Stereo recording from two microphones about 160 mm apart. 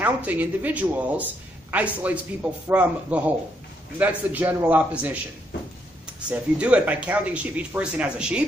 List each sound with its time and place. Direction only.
0.0 s speech: 10° right (ahead or behind)
6.1 s speech: 10° right (ahead or behind)